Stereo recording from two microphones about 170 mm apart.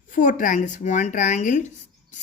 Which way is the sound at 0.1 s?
50° left (ahead or behind).